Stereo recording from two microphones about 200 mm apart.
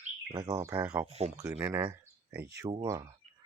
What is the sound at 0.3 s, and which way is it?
Speech, 15° right (ahead or behind).